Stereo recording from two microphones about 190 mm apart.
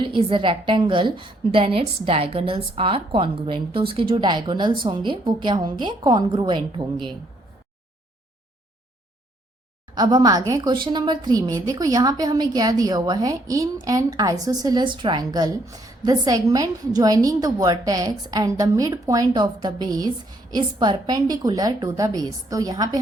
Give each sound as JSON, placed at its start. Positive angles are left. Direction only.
{"t": 0.0, "sound": "a woman's voice", "side_deg": -25}
{"t": 9.9, "sound": "a woman's voice", "side_deg": -25}